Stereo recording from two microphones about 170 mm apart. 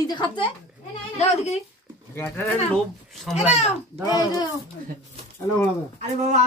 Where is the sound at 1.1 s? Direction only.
40° left (ahead or behind).